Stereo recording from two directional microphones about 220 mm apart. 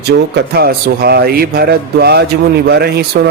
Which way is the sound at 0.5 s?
45° right (ahead or behind).